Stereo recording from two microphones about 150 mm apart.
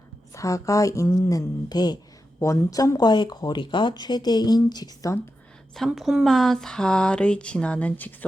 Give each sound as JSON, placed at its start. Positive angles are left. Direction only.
{"t": 0.3, "sound": "speech", "side_deg": 20}
{"t": 5.7, "sound": "speech", "side_deg": 0}